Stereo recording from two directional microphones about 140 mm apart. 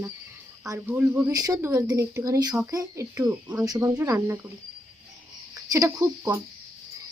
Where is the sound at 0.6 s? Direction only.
15° right (ahead or behind).